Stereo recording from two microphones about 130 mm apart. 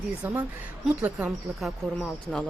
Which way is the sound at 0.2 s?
15° right (ahead or behind).